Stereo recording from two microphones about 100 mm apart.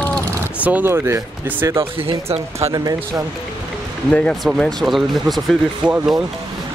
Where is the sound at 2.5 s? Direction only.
30° right (ahead or behind).